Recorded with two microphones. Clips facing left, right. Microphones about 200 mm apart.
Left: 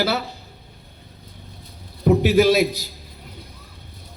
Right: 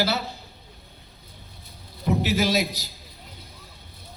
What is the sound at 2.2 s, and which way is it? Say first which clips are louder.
Speech: left 8 dB; 55° left (ahead or behind).